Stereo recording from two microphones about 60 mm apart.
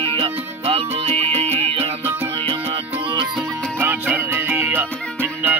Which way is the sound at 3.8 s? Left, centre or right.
Right.